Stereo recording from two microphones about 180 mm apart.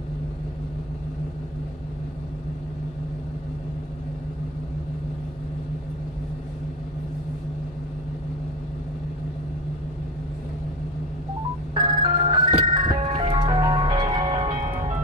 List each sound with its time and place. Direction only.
11.7 s ice cream truck: 25° right (ahead or behind)